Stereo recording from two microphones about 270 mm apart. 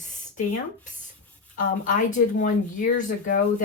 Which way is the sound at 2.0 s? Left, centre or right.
Left.